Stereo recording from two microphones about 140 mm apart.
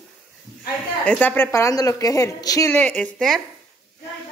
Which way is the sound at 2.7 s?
10° left (ahead or behind).